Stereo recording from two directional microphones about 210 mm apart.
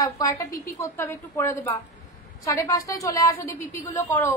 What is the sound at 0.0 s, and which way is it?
A woman's voice, 15° left (ahead or behind).